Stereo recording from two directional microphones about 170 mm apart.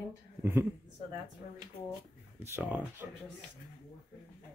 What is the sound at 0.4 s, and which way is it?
Speech, 15° right (ahead or behind).